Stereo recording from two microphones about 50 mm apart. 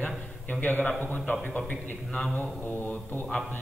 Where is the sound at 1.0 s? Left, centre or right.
Left.